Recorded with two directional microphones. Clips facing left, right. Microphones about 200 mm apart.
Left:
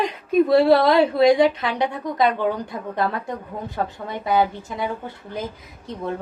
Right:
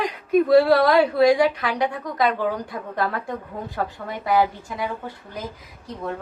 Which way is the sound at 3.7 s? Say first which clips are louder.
Left 1 dB; 20° left (ahead or behind).